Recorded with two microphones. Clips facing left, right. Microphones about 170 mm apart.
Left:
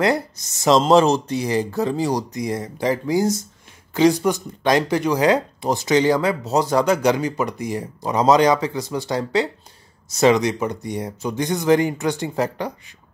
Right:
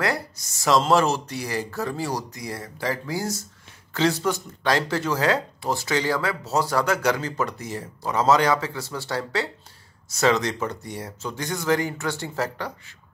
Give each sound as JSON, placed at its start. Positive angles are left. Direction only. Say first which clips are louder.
{"t": 0.0, "sound": "speech", "louder": "left 6 dB", "side_deg": 20}